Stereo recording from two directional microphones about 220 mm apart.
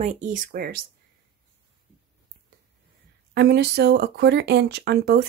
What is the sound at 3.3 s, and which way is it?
Speech, 50° right (ahead or behind).